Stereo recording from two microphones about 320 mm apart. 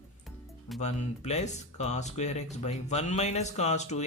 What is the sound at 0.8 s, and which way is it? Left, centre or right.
Speech, left.